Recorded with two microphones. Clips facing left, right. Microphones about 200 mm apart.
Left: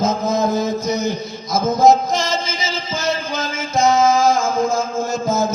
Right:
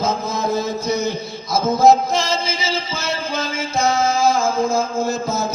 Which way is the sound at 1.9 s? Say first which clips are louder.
Even; 45° left (ahead or behind).